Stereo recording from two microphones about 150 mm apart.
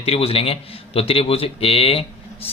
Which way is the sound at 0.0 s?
40° left (ahead or behind).